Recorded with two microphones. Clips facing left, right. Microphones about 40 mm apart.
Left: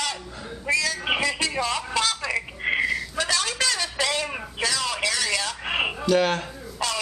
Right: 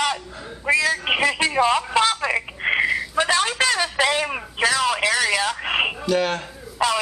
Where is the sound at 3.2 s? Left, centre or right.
Right.